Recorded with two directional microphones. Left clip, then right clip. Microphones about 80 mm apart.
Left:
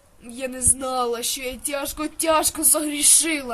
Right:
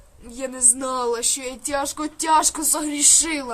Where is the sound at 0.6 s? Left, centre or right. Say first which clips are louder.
Right 2 dB; right.